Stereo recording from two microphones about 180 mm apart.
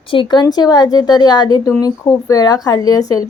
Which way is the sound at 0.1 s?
25° left (ahead or behind).